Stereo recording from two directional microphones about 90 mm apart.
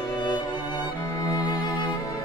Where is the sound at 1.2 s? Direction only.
45° left (ahead or behind).